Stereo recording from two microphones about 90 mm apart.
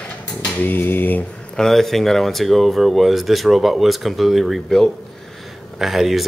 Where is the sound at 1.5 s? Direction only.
5° left (ahead or behind).